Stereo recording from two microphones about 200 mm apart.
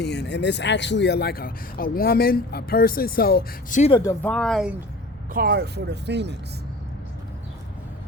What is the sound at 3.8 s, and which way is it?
Speech, 25° left (ahead or behind).